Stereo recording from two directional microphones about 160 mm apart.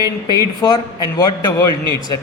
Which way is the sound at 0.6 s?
30° left (ahead or behind).